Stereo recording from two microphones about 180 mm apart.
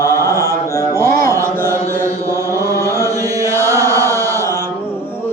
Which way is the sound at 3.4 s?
15° right (ahead or behind).